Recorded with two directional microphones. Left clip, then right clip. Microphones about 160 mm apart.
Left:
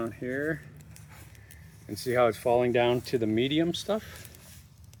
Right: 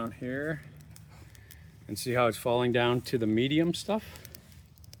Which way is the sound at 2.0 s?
60° right (ahead or behind).